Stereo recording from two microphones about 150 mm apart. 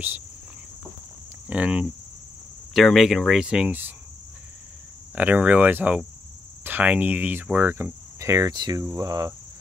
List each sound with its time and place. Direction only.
1.5 s cricket: 10° right (ahead or behind)
2.7 s speech: centre (ahead or behind)
5.1 s cricket: 10° right (ahead or behind); by 9.3 s 25° right (ahead or behind)